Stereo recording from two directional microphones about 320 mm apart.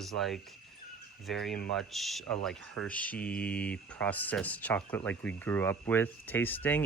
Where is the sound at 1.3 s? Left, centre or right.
Centre.